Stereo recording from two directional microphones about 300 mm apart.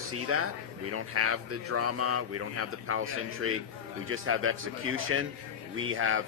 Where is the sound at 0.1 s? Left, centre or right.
Right.